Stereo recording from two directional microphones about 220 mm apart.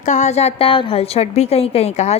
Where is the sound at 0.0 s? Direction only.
30° left (ahead or behind).